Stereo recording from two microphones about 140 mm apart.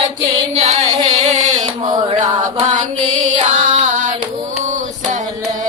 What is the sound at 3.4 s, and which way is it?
Singing, 55° right (ahead or behind).